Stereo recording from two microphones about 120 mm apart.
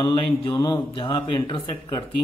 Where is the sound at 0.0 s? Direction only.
40° left (ahead or behind).